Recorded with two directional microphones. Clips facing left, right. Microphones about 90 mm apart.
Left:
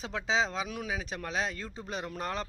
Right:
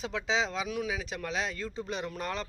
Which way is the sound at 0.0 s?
35° left (ahead or behind).